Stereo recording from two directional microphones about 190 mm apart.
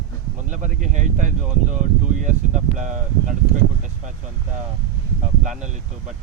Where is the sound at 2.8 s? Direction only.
40° right (ahead or behind).